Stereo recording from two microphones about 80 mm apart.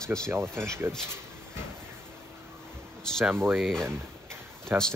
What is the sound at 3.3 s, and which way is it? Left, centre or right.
Speech, right.